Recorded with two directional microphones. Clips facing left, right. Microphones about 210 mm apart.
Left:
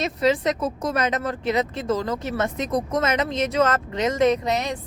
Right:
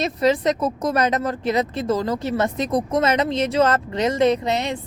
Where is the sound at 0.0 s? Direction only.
40° right (ahead or behind).